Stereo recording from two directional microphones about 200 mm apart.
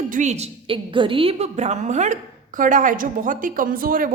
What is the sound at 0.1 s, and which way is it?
A woman's voice, 35° right (ahead or behind).